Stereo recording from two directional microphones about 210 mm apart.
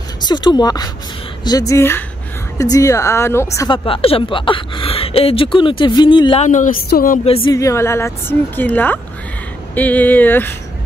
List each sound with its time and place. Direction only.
0.2 s a woman's voice: 20° left (ahead or behind)
6.4 s a woman's voice: 35° left (ahead or behind)
7.5 s a woman's voice: 15° left (ahead or behind)